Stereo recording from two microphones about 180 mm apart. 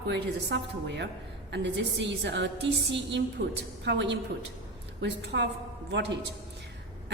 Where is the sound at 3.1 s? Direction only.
85° right.